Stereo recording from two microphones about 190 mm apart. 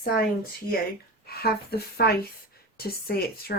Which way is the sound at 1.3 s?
55° left (ahead or behind).